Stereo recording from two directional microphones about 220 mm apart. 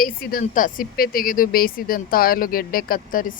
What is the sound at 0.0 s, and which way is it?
Speech, 40° left (ahead or behind).